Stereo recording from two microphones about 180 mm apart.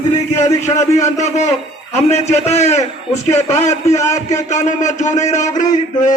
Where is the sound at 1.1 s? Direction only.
40° left (ahead or behind).